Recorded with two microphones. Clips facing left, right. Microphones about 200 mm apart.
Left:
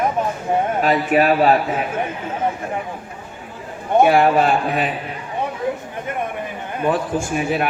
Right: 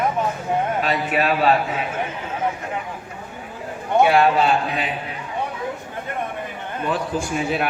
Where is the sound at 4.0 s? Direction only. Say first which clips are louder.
Left 2 dB; 50° left (ahead or behind).